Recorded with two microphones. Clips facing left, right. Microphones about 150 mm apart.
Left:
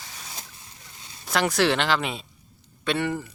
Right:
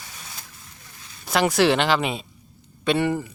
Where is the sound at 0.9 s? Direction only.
25° left (ahead or behind).